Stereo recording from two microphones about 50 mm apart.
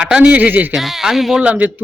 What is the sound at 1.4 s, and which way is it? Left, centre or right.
Speech, right.